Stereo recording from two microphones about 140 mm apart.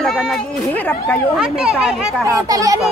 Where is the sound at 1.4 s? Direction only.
5° right (ahead or behind).